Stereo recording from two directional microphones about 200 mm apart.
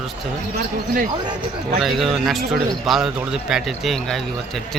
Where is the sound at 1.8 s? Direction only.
Centre (ahead or behind).